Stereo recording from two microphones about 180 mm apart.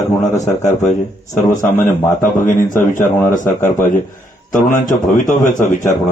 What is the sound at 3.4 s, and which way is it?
A man's voice, 45° left (ahead or behind).